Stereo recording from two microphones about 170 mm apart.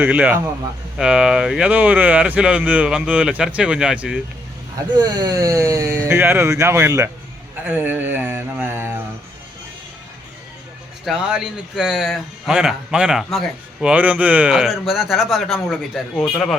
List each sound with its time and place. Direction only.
0.0 s speech: 10° right (ahead or behind)
4.9 s speech: 25° right (ahead or behind)
11.0 s a man's voice: 5° right (ahead or behind)